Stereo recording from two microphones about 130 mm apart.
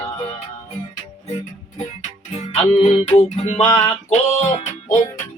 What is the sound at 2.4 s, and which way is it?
Music, 55° left (ahead or behind).